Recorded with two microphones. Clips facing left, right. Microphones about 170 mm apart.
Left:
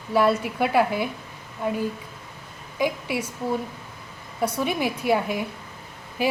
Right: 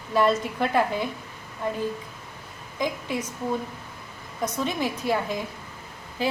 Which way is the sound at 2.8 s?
10° left (ahead or behind).